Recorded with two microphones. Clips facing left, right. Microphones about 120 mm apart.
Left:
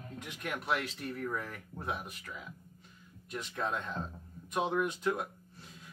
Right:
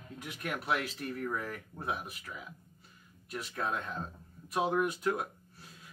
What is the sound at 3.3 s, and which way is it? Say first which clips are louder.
A man's voice: even; 5° right (ahead or behind).